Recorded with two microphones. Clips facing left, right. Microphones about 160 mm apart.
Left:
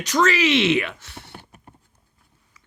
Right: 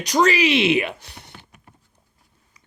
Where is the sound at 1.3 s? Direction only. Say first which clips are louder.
Left 4 dB; 40° left (ahead or behind).